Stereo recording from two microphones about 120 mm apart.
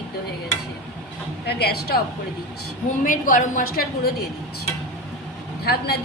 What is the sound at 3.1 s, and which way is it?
Speech, 90° left.